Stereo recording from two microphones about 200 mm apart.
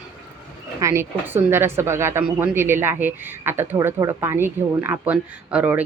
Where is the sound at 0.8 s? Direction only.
15° right (ahead or behind).